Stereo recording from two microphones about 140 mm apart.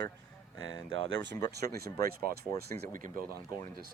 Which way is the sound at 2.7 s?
20° left (ahead or behind).